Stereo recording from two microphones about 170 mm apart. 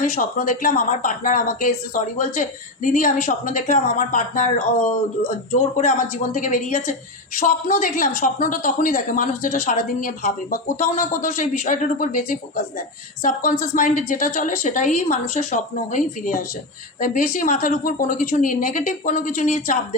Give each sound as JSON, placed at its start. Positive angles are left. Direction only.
{"t": 0.2, "sound": "speech", "side_deg": 55}